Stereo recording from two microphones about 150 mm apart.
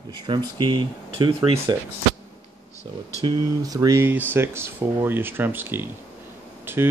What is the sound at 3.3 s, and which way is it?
Speech, 25° right (ahead or behind).